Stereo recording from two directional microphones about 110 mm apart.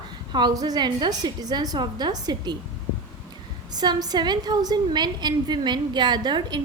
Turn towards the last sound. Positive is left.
turn(degrees=-40)  # may be behind; listen again after turning